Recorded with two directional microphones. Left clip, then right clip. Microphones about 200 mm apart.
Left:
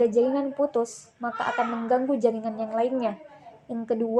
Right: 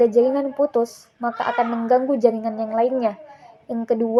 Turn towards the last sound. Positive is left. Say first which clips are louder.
# right 6 dB
turn(degrees=-15)  # may be behind; listen again after turning